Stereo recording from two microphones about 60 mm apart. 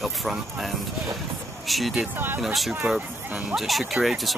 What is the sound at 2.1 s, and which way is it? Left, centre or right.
Speech, right.